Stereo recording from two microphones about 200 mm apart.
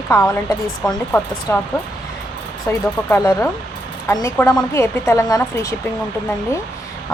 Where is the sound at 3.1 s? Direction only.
10° left (ahead or behind).